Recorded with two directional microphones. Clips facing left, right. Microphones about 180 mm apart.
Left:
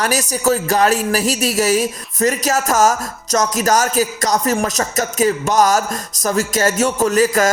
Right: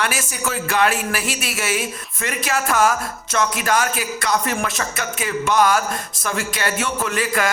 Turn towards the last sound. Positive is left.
turn(degrees=40)  # may be behind; listen again after turning